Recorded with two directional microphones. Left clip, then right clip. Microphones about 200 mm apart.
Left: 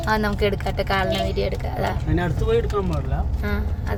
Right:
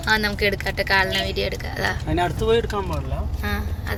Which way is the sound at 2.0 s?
45° right (ahead or behind).